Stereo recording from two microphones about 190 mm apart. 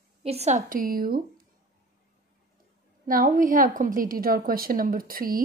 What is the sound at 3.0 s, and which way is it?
A woman's voice, 45° right (ahead or behind).